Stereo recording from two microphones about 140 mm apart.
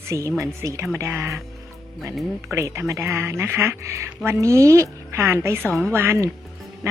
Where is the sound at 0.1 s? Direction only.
20° right (ahead or behind).